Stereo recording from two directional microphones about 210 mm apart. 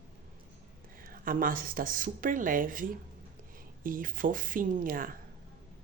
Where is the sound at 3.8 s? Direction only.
40° right (ahead or behind).